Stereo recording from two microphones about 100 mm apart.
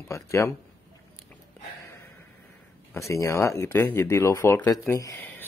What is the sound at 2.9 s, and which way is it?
Speech, 30° left (ahead or behind).